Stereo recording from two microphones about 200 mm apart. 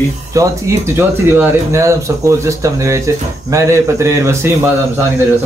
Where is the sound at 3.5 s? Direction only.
15° right (ahead or behind).